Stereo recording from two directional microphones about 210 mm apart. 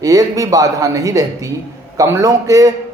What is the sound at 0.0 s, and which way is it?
A man's voice, 15° right (ahead or behind).